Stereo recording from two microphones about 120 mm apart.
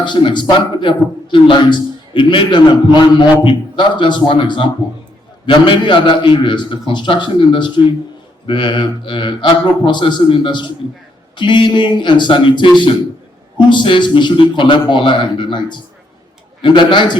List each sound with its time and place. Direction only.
0.0 s a man's voice: 40° left (ahead or behind)